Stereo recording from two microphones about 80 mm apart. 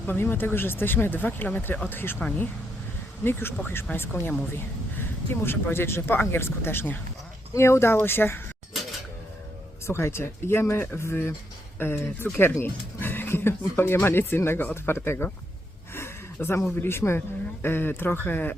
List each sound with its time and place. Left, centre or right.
0.0 s a woman's voice: left
3.2 s a woman's voice: left
9.8 s a woman's voice: left
16.0 s a sound: left
16.8 s a woman's voice: left